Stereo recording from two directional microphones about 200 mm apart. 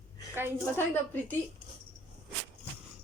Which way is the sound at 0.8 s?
10° left (ahead or behind).